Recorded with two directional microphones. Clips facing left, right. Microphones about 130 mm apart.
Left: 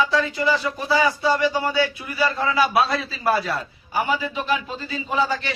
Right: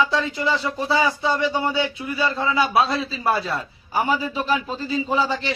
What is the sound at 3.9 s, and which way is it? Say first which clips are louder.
A man's voice: right 1 dB; 40° right (ahead or behind).